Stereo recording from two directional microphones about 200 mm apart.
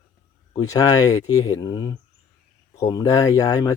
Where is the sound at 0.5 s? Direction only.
15° left (ahead or behind).